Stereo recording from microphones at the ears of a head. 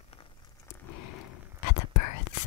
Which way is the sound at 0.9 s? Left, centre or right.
Left.